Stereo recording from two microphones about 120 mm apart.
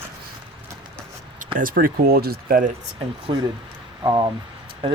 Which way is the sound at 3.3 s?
40° right (ahead or behind).